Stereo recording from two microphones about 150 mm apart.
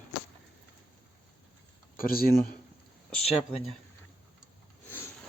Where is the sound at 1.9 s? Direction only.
75° left (ahead or behind).